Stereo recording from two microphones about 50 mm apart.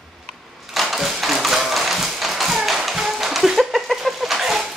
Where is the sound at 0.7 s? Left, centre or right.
Centre.